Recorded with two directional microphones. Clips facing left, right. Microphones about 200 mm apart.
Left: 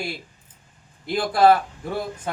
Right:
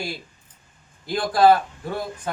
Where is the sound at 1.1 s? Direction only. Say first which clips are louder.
Even; 5° left (ahead or behind).